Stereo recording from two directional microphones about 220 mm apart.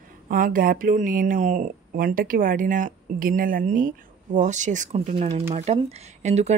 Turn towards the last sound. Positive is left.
turn(degrees=-30)  # may be behind; listen again after turning